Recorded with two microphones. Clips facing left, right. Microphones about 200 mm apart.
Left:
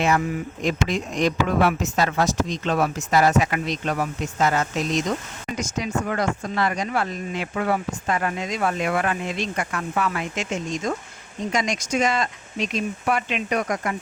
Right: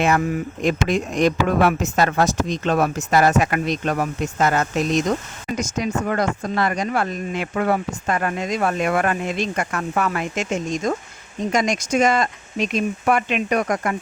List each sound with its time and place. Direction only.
0.6 s speech: 55° right (ahead or behind)